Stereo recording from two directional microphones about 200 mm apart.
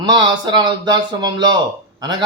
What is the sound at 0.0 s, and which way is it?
A man's voice, 20° right (ahead or behind).